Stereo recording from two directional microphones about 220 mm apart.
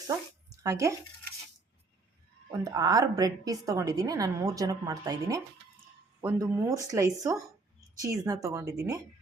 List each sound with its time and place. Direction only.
0.1 s speech: 15° right (ahead or behind)
2.5 s a woman's voice: 15° right (ahead or behind)